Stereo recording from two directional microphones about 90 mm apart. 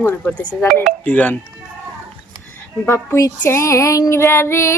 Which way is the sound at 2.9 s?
30° left (ahead or behind).